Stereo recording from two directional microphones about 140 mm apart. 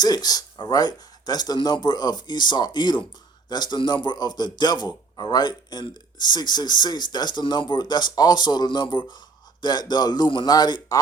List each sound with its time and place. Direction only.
0.0 s a man's voice: 30° left (ahead or behind)